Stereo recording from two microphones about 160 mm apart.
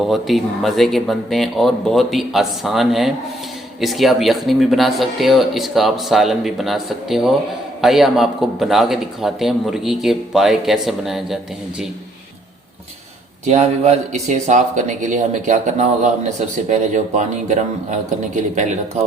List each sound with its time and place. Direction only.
0.1 s speech: centre (ahead or behind)
13.4 s speech: 45° right (ahead or behind)